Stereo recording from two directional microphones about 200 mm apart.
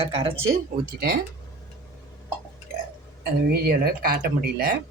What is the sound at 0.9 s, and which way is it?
Speech, 50° right (ahead or behind).